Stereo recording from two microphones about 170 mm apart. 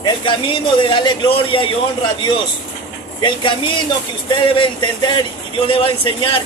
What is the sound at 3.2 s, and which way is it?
A man's voice, 30° left (ahead or behind).